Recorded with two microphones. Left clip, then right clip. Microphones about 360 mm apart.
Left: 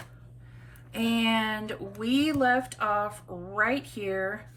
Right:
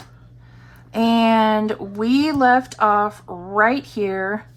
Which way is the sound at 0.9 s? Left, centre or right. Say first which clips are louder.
Right 11 dB; centre.